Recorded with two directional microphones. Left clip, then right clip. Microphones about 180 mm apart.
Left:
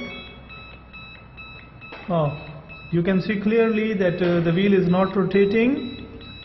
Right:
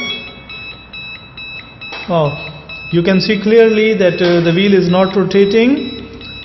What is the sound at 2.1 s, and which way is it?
A man's voice, 10° right (ahead or behind).